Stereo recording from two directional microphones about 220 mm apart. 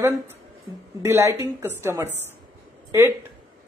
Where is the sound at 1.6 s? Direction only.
10° right (ahead or behind).